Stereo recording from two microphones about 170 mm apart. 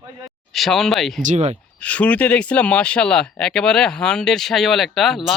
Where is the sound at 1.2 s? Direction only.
45° right (ahead or behind).